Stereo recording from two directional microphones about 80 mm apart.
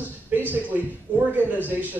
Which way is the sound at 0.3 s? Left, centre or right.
Right.